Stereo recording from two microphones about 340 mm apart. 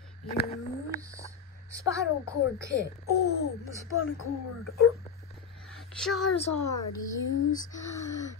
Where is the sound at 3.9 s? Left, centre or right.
Left.